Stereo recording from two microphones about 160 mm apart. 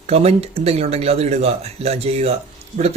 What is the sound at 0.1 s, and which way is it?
A man's voice, 40° right (ahead or behind).